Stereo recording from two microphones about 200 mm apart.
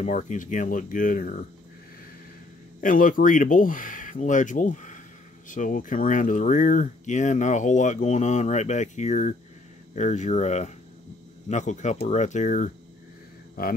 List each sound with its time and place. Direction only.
0.0 s speech: 35° left (ahead or behind)
2.8 s speech: 40° left (ahead or behind)